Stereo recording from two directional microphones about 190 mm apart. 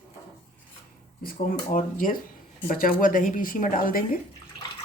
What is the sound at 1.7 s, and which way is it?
A woman's voice, 45° left (ahead or behind).